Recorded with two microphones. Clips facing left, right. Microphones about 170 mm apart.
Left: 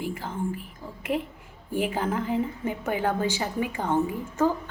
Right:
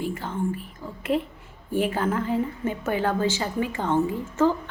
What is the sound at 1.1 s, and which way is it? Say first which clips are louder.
Speech: right 3 dB; 15° right (ahead or behind).